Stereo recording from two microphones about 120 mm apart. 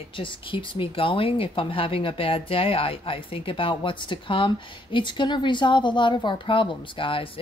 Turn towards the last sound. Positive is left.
turn(degrees=45)  # may be behind; listen again after turning